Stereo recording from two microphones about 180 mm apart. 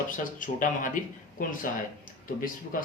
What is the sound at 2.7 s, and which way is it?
Speech, 50° left (ahead or behind).